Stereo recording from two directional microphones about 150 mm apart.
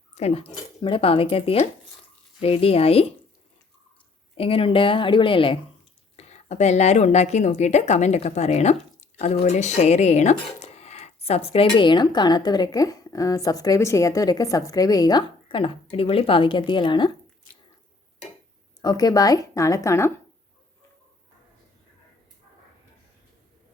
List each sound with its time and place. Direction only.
0.1 s speech: 45° left (ahead or behind)
4.4 s speech: 40° left (ahead or behind)
6.1 s speech: 45° left (ahead or behind)
18.8 s a woman's voice: 25° left (ahead or behind)